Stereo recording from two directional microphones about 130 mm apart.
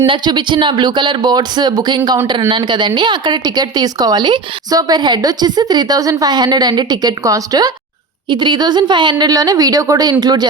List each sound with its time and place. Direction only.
0.0 s speech: 40° right (ahead or behind)